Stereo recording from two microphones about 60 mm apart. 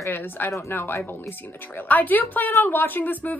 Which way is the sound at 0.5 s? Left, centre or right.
Left.